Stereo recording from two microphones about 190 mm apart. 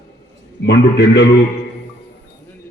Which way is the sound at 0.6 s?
65° left (ahead or behind).